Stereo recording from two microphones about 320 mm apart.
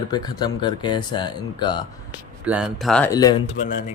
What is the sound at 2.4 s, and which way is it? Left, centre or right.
Speech, centre.